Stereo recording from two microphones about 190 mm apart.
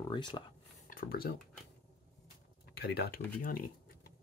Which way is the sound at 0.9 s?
50° left (ahead or behind).